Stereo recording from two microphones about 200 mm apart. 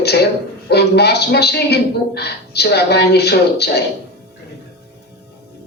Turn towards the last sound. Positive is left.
turn(degrees=55)  # may be behind; listen again after turning